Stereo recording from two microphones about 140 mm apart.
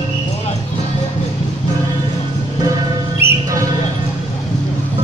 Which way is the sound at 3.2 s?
15° right (ahead or behind).